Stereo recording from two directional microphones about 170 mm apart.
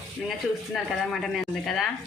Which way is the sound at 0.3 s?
Centre (ahead or behind).